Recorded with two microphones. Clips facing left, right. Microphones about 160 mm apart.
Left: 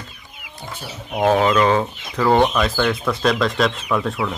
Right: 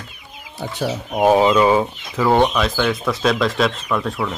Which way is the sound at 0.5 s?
90° right.